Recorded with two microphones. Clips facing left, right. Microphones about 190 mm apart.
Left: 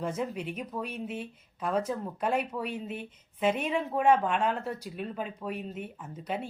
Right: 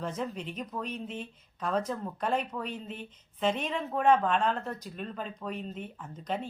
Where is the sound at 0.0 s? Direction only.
10° left (ahead or behind).